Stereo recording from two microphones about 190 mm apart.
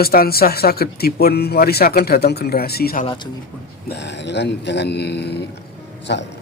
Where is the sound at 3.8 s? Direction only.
65° left (ahead or behind).